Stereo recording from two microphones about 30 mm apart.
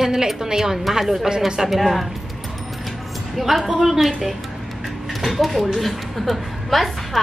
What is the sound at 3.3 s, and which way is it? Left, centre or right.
Speech, centre.